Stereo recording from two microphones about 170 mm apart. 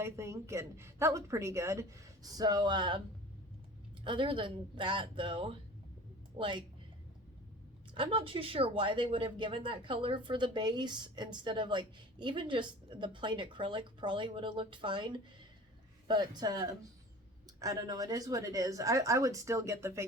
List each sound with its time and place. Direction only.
0.0 s a woman's voice: 15° right (ahead or behind)
4.0 s speech: 30° right (ahead or behind)
7.9 s speech: 30° right (ahead or behind)